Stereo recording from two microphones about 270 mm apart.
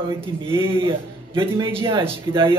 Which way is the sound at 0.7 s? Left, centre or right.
Centre.